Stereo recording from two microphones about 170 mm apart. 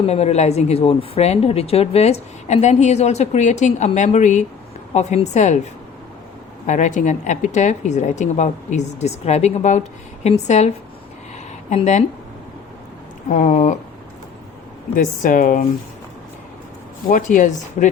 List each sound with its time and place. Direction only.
0.0 s a woman's voice: 40° left (ahead or behind)
6.7 s a woman's voice: 45° left (ahead or behind)
13.2 s a woman's voice: 45° left (ahead or behind)
14.9 s a woman's voice: 50° left (ahead or behind)
17.1 s a woman's voice: 50° left (ahead or behind)